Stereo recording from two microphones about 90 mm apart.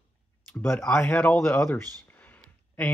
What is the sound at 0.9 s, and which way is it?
Speech, 25° left (ahead or behind).